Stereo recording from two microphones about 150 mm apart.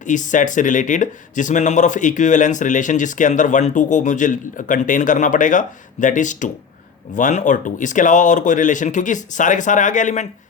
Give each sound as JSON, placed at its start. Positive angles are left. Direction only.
{"t": 0.0, "sound": "speech", "side_deg": 55}